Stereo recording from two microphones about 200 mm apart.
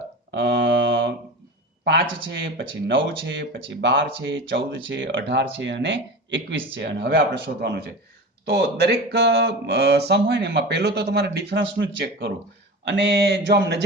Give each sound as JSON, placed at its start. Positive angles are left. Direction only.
{"t": 0.3, "sound": "mantra", "side_deg": -65}
{"t": 1.8, "sound": "a man's voice", "side_deg": -55}
{"t": 2.3, "sound": "speech", "side_deg": -70}